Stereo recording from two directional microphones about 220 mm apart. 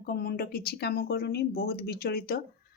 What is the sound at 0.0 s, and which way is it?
Speech, 45° left (ahead or behind).